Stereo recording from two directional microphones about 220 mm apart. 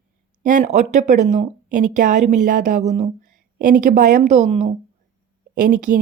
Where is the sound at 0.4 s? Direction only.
35° right (ahead or behind).